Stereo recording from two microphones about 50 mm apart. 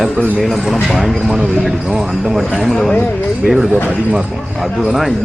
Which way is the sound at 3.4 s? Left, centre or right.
Centre.